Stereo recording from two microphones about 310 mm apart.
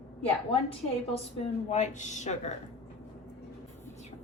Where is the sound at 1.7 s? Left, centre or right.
Left.